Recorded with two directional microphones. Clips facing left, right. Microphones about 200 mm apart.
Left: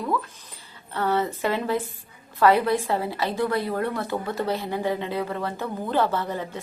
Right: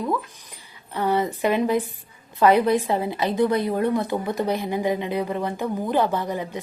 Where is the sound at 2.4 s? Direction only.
20° right (ahead or behind).